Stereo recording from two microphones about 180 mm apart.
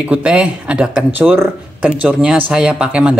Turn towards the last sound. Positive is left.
turn(degrees=-5)  # may be behind; listen again after turning